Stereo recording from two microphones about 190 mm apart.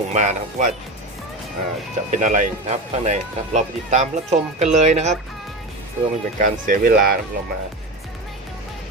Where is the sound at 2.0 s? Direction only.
40° right (ahead or behind).